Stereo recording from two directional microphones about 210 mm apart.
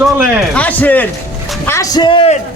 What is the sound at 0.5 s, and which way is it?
A man's voice, 5° left (ahead or behind).